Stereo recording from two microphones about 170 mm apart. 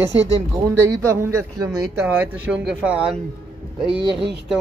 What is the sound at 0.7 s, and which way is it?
Speech, 15° right (ahead or behind).